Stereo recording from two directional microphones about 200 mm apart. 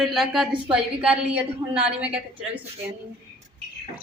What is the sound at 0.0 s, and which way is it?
A woman's voice, centre (ahead or behind).